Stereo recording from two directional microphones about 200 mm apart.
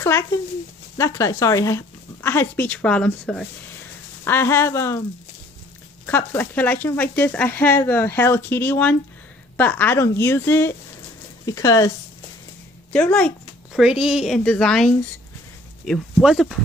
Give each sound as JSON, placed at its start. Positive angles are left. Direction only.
{"t": 0.0, "sound": "speech", "side_deg": 15}
{"t": 6.0, "sound": "speech", "side_deg": 10}
{"t": 12.9, "sound": "speech", "side_deg": 5}